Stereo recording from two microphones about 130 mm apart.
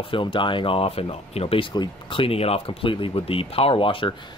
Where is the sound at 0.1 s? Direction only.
40° left (ahead or behind).